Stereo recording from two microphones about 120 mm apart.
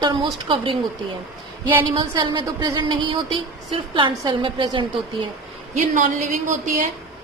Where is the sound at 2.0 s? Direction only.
35° right (ahead or behind).